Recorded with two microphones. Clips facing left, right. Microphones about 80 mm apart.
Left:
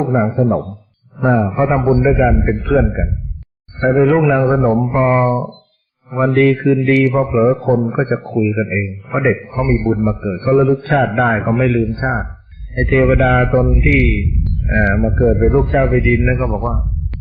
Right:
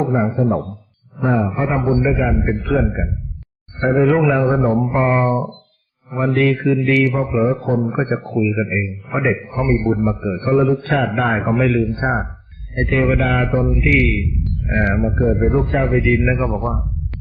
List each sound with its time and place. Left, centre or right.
1.2 s a man's voice: left
4.2 s a man's voice: centre
6.1 s a man's voice: left
9.6 s a man's voice: centre
12.0 s speech: centre
12.7 s a man's voice: left
15.7 s a man's voice: left
16.1 s a man's voice: centre